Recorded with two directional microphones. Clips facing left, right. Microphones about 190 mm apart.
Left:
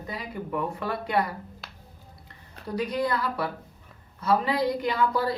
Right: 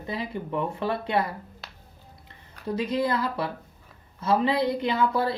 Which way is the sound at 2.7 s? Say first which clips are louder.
Right 2 dB; 25° right (ahead or behind).